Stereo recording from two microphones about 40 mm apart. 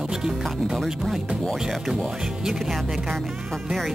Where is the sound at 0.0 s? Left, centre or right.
Centre.